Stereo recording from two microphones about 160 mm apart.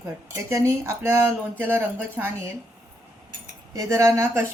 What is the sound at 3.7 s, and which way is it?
Speech, 20° right (ahead or behind).